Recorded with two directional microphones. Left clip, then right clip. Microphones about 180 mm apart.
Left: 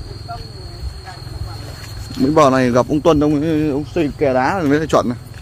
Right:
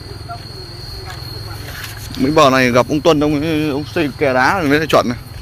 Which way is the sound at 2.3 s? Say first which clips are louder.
Right 2 dB; 25° left (ahead or behind).